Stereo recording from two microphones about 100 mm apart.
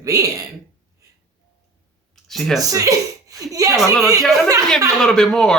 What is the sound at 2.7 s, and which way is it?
A woman's voice, 35° right (ahead or behind).